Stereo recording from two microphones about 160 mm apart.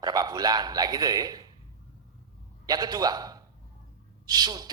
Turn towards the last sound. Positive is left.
turn(degrees=-25)  # may be behind; listen again after turning